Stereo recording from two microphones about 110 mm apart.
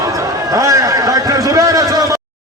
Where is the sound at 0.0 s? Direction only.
30° right (ahead or behind).